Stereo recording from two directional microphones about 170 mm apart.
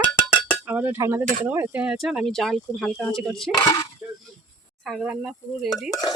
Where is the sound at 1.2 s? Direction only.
50° right (ahead or behind).